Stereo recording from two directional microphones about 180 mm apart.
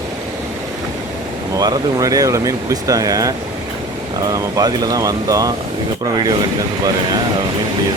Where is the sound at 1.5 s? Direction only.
20° right (ahead or behind).